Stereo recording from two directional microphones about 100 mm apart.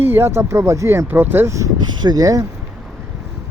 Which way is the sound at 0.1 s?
25° right (ahead or behind).